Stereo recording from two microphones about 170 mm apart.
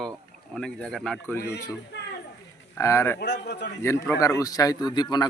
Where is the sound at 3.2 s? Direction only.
85° left.